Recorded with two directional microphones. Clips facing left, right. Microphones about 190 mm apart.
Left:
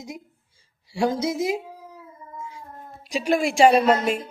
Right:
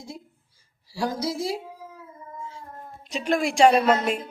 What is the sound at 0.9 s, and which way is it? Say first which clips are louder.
Speech: left 5 dB; 25° left (ahead or behind).